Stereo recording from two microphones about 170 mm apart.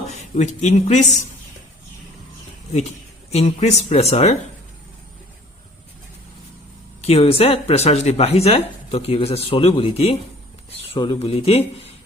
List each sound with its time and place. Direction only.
0.3 s speech: 40° left (ahead or behind)
3.3 s speech: 40° left (ahead or behind)
7.0 s speech: 35° left (ahead or behind)